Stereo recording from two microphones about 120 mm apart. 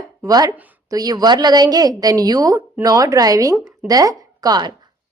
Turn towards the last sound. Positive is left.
turn(degrees=-35)  # may be behind; listen again after turning